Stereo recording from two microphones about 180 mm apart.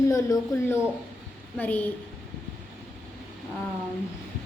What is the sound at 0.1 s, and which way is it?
A woman's voice, 20° left (ahead or behind).